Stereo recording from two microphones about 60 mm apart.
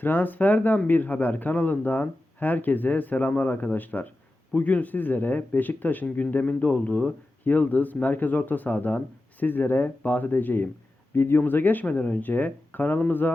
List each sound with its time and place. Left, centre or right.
0.0 s speech: left